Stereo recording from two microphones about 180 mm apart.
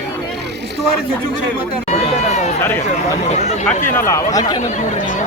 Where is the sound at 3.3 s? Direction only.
40° left (ahead or behind).